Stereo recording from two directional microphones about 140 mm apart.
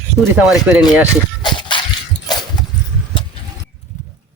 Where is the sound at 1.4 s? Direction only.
35° left (ahead or behind).